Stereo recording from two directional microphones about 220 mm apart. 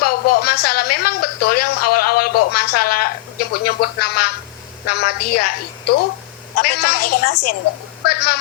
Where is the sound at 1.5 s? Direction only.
90° left.